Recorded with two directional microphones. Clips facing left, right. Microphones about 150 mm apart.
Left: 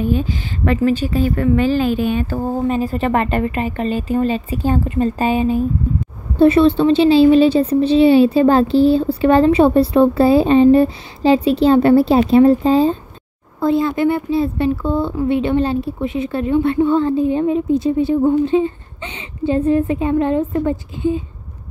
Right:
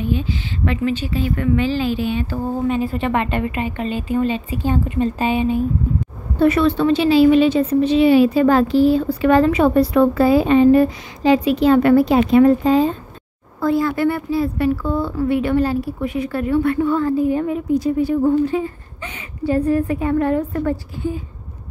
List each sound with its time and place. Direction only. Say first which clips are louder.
0.0 s a woman's voice: left 3 dB; 45° left (ahead or behind)
6.3 s a woman's voice: left 4 dB; 30° left (ahead or behind)